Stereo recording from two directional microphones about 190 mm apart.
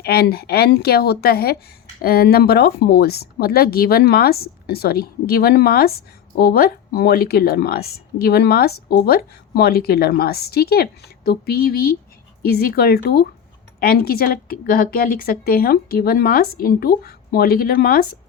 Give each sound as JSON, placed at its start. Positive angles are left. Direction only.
{"t": 0.0, "sound": "speech", "side_deg": 55}